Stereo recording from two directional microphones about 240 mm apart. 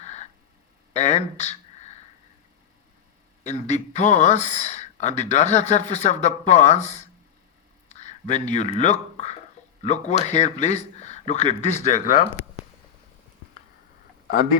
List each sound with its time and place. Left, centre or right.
0.0 s a sound: left
0.9 s speech: left
3.4 s speech: left